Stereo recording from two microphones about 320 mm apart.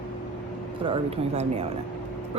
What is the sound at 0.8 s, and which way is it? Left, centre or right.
Speech, centre.